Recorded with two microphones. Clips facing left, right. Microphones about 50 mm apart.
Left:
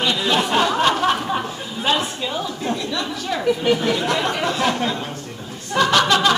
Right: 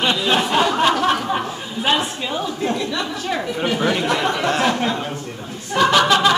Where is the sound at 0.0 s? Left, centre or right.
Right.